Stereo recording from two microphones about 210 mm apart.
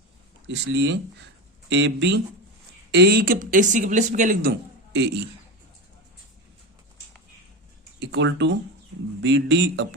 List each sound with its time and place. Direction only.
0.4 s speech: 55° right (ahead or behind); by 4.5 s 40° right (ahead or behind)
4.9 s a man's voice: 55° right (ahead or behind)
7.9 s speech: 60° right (ahead or behind)